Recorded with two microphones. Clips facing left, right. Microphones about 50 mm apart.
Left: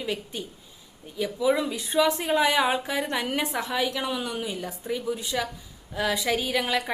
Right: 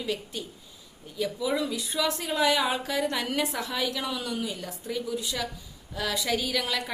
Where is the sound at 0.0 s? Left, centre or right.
Left.